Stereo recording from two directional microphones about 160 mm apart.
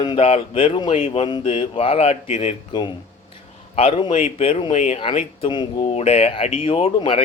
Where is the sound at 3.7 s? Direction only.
35° left (ahead or behind).